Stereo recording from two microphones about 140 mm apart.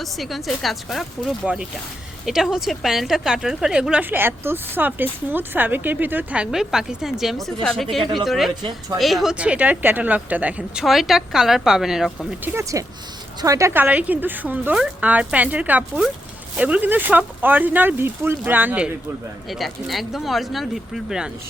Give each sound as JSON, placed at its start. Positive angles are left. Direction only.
{"t": 0.0, "sound": "a woman's voice", "side_deg": 0}
{"t": 12.5, "sound": "speech", "side_deg": -25}
{"t": 19.5, "sound": "a woman's voice", "side_deg": 0}